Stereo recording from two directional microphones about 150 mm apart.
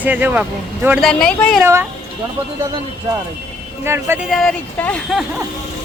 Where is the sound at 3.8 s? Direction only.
15° right (ahead or behind).